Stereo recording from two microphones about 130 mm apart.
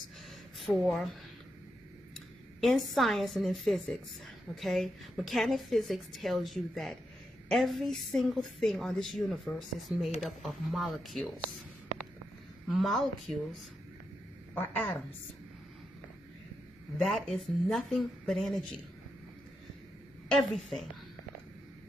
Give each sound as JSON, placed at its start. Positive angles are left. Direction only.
{"t": 0.6, "sound": "speech", "side_deg": 0}
{"t": 2.6, "sound": "a woman's voice", "side_deg": 0}
{"t": 12.6, "sound": "a woman's voice", "side_deg": 0}
{"t": 14.5, "sound": "a woman's voice", "side_deg": 10}
{"t": 17.0, "sound": "a woman's voice", "side_deg": 0}
{"t": 20.2, "sound": "a woman's voice", "side_deg": 5}